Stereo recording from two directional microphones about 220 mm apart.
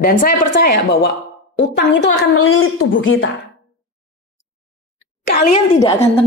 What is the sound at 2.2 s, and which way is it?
A woman's voice, 70° left (ahead or behind).